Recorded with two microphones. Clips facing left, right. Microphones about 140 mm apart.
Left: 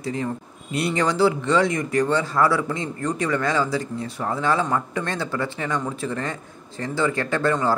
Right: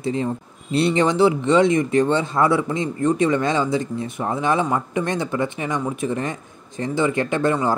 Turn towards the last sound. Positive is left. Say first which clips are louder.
# right 1 dB
turn(degrees=-15)  # may be behind; listen again after turning